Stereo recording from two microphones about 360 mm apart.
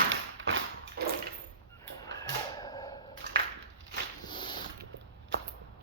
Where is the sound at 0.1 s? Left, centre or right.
Right.